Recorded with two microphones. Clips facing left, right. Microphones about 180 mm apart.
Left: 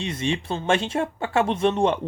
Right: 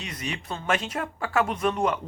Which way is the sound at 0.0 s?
25° left (ahead or behind).